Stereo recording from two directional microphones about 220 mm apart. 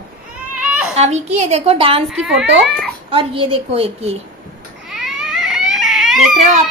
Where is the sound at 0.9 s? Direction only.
30° right (ahead or behind).